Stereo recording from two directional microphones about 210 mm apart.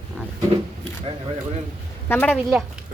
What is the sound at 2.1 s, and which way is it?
Speech, 10° left (ahead or behind).